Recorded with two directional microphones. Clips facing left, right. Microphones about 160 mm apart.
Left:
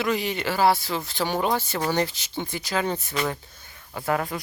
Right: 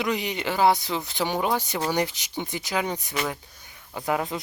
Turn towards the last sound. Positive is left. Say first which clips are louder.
# left 1 dB
turn(degrees=-20)  # may be behind; listen again after turning